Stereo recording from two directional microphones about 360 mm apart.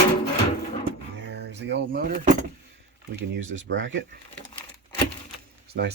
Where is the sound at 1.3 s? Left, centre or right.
Right.